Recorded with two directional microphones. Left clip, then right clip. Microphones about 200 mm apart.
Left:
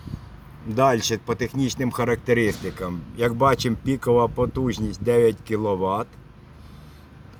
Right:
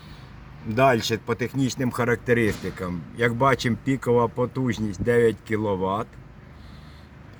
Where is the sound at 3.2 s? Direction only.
15° left (ahead or behind).